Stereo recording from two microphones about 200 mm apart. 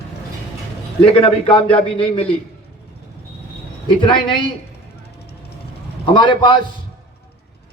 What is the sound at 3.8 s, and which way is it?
Speech, 25° left (ahead or behind).